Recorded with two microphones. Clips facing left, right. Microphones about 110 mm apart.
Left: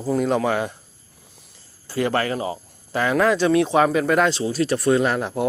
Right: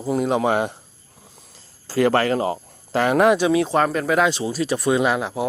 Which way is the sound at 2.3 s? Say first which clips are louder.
Right 4 dB; 50° right (ahead or behind).